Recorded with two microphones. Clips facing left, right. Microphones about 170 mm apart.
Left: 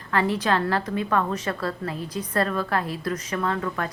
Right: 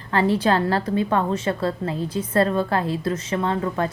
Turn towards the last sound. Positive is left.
turn(degrees=-25)  # may be behind; listen again after turning